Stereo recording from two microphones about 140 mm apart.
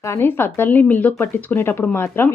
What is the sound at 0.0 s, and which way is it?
Speech, 20° left (ahead or behind).